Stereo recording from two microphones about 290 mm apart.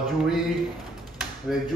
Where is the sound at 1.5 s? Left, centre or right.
Centre.